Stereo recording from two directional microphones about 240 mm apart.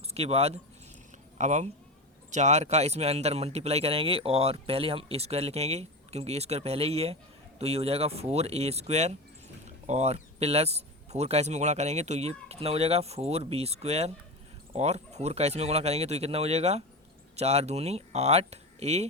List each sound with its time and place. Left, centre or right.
0.0 s speech: right
1.1 s a sound: right
2.3 s speech: right